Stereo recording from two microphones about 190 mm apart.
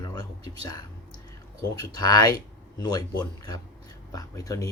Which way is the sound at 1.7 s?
20° left (ahead or behind).